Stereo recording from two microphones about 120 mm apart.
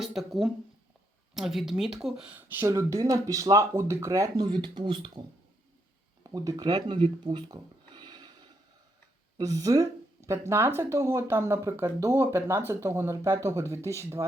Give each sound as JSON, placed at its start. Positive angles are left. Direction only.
{"t": 0.0, "sound": "speech", "side_deg": 0}
{"t": 4.4, "sound": "speech", "side_deg": -40}
{"t": 6.2, "sound": "speech", "side_deg": -30}